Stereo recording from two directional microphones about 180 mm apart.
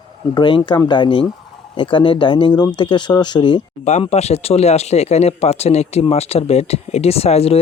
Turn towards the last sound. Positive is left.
turn(degrees=35)  # may be behind; listen again after turning